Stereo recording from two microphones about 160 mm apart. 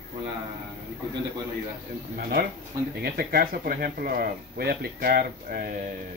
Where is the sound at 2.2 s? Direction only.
70° right (ahead or behind).